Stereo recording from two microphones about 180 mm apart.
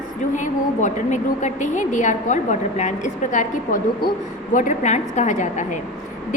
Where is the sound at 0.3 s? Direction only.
45° left (ahead or behind).